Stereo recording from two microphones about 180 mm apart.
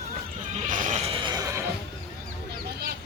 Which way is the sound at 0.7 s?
45° right (ahead or behind).